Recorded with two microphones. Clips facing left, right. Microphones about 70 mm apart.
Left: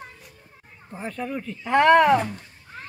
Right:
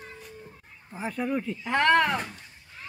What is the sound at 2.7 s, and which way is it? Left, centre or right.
Duck, left.